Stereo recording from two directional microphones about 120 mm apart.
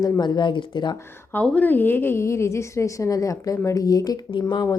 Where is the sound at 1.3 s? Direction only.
15° left (ahead or behind).